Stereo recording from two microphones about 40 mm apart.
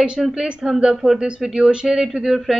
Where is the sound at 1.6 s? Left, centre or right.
Right.